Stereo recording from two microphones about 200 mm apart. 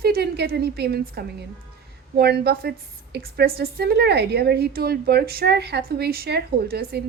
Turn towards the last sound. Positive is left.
turn(degrees=-55)  # may be behind; listen again after turning